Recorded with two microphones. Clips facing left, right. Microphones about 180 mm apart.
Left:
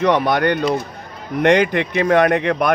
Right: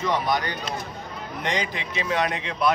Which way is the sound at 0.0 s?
65° left (ahead or behind).